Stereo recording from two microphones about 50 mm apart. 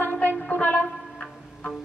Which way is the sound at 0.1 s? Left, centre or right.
Left.